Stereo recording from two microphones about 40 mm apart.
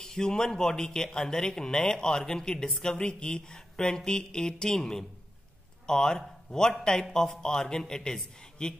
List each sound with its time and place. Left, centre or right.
0.0 s a man's voice: centre
7.1 s a man's voice: centre